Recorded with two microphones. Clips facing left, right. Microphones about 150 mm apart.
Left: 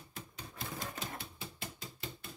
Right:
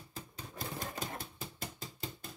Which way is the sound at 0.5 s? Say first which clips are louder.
Right 2 dB; 45° right (ahead or behind).